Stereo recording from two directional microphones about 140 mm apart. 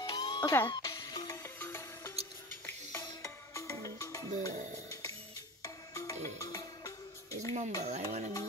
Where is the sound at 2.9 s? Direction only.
20° left (ahead or behind).